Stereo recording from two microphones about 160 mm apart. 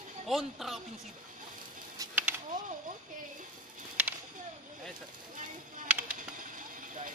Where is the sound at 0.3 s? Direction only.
Centre (ahead or behind).